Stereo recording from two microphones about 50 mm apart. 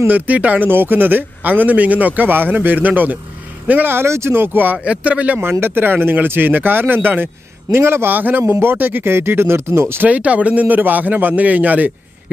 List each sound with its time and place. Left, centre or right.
0.1 s a man's voice: right
0.7 s a man's voice: right
3.9 s a man's voice: right
4.8 s speech: right
5.4 s a man's voice: right
7.7 s a man's voice: right
8.1 s a man's voice: right
10.0 s a man's voice: right